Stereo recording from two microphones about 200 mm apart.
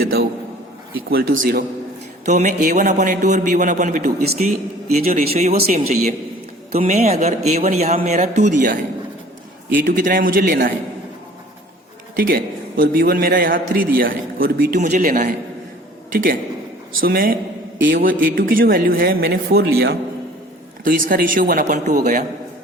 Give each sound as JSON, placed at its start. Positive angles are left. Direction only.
{"t": 0.0, "sound": "a man's voice", "side_deg": -50}
{"t": 1.4, "sound": "a man's voice", "side_deg": -45}
{"t": 2.2, "sound": "a man's voice", "side_deg": -35}
{"t": 4.4, "sound": "a man's voice", "side_deg": -35}
{"t": 12.1, "sound": "a man's voice", "side_deg": -45}